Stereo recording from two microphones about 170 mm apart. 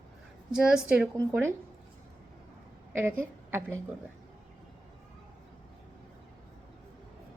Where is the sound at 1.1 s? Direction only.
15° right (ahead or behind).